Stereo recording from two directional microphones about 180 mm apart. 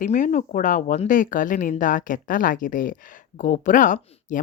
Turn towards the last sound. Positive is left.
turn(degrees=45)  # may be behind; listen again after turning